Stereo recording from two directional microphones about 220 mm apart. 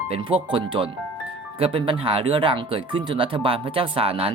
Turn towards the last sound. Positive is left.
turn(degrees=-25)  # may be behind; listen again after turning